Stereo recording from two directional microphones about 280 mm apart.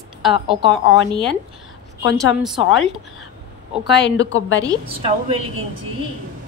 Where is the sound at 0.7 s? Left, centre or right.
Left.